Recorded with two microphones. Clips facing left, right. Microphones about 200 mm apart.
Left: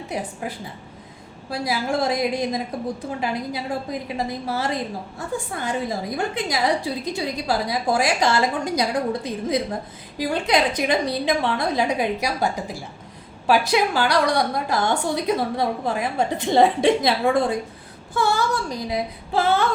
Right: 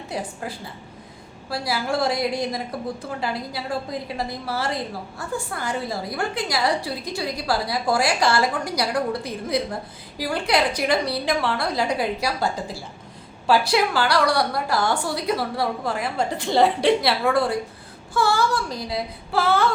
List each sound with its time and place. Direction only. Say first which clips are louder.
0.1 s a woman's voice: left 1 dB; 20° left (ahead or behind)